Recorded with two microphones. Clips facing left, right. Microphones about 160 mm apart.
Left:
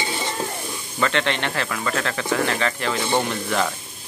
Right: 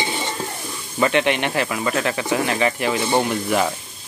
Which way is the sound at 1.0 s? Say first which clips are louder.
Right 4 dB; 15° right (ahead or behind).